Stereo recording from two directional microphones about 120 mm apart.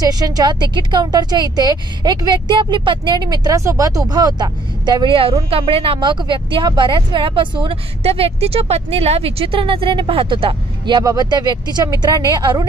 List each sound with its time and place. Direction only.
0.0 s a woman's voice: 30° right (ahead or behind)
5.5 s a woman's voice: 50° right (ahead or behind)